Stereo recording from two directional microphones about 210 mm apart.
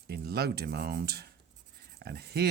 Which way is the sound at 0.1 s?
50° right (ahead or behind).